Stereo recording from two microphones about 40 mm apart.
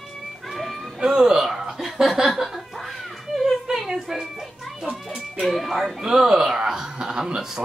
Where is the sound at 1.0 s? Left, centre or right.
Centre.